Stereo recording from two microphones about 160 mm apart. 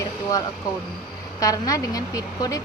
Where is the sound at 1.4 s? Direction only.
20° left (ahead or behind).